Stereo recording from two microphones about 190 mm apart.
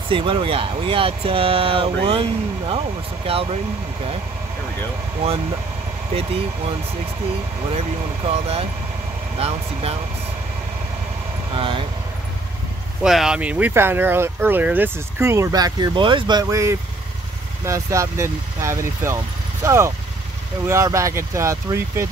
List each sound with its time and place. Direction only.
0.1 s speech: 25° right (ahead or behind)
8.3 s speech: 30° right (ahead or behind)
11.5 s speech: 30° right (ahead or behind)
13.0 s speech: centre (ahead or behind)